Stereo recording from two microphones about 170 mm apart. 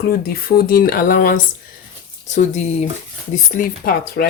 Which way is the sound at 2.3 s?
45° left (ahead or behind).